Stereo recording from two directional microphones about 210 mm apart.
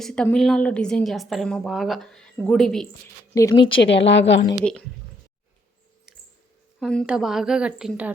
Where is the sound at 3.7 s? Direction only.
55° left (ahead or behind).